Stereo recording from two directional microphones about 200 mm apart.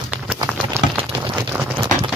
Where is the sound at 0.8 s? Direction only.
15° right (ahead or behind).